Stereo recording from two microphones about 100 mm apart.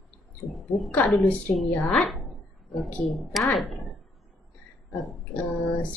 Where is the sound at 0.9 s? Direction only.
15° left (ahead or behind).